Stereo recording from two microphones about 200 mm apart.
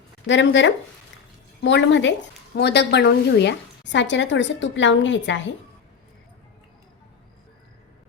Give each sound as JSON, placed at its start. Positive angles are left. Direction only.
{"t": 0.3, "sound": "speech", "side_deg": 65}